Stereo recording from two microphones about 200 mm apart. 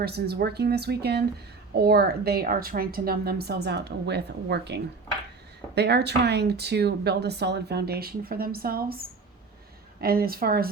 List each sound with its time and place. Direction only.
0.0 s a woman's voice: 50° right (ahead or behind)